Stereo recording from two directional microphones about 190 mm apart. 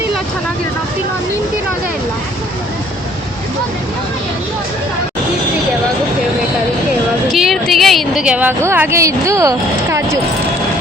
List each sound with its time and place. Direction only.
7.3 s a woman's voice: centre (ahead or behind)